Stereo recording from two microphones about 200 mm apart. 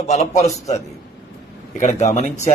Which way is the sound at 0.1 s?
35° left (ahead or behind).